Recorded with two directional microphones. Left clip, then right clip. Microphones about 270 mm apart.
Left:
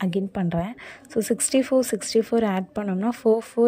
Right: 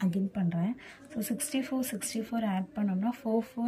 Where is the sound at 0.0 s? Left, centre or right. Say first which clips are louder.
Left 8 dB; centre.